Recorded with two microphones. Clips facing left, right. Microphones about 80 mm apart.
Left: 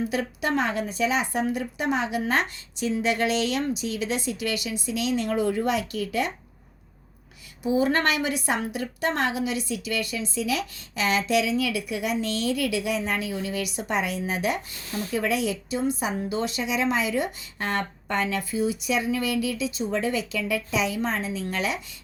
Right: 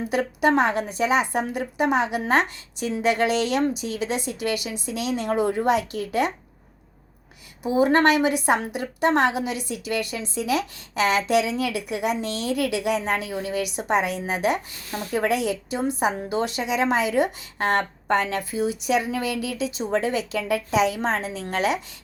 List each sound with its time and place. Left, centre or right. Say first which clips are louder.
0.1 s a woman's voice: right 6 dB; right
2.8 s a woman's voice: right 2 dB; right
4.5 s a woman's voice: even; right
7.8 s a woman's voice: right 6 dB; right
8.7 s a woman's voice: right 5 dB; right
9.3 s a woman's voice: even; right
12.5 s a woman's voice: right 5 dB; right
13.3 s a woman's voice: right 3 dB; right
16.4 s a woman's voice: right 4 dB; right